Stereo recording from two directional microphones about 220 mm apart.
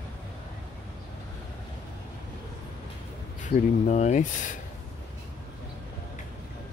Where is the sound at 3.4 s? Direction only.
35° left (ahead or behind).